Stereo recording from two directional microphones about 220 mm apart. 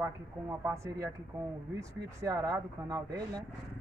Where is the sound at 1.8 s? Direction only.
15° right (ahead or behind).